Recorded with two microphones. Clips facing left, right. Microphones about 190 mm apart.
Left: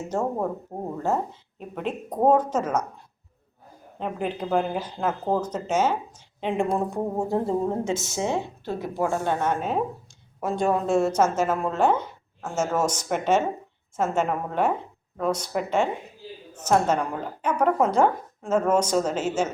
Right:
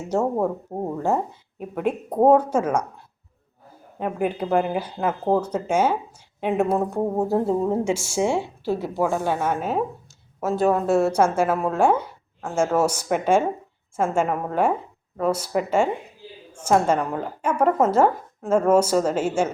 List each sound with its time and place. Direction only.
0.1 s a woman's voice: 10° right (ahead or behind)
3.9 s a woman's voice: 10° right (ahead or behind)